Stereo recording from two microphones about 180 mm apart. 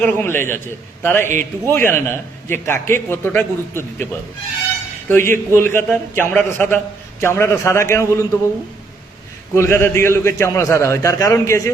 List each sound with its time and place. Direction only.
0.0 s a man's voice: 10° left (ahead or behind)
9.6 s a man's voice: 15° left (ahead or behind)